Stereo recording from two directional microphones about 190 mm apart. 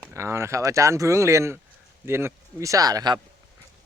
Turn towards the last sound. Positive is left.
turn(degrees=-20)  # may be behind; listen again after turning